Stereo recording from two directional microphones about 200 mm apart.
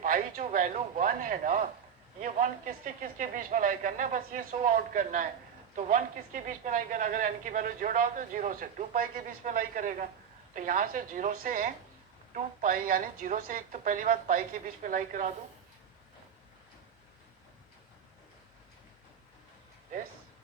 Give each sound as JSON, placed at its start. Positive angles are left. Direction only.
{"t": 0.0, "sound": "a woman's voice", "side_deg": -40}